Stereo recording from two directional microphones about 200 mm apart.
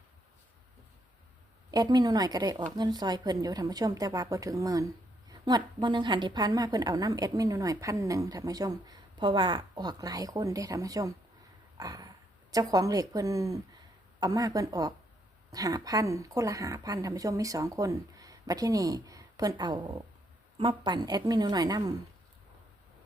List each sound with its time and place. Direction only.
1.7 s a woman's voice: 20° right (ahead or behind)